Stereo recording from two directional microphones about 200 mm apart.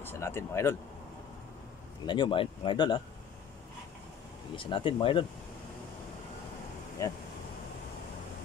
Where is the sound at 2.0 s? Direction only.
25° left (ahead or behind).